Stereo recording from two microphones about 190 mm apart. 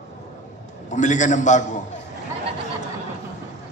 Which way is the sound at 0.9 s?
40° left (ahead or behind).